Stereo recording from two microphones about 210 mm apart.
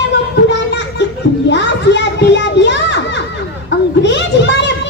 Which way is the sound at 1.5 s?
55° left (ahead or behind).